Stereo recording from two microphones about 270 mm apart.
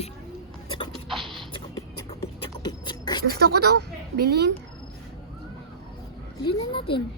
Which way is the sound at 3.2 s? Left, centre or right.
Right.